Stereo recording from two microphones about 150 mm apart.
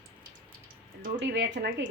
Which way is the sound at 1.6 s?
80° right.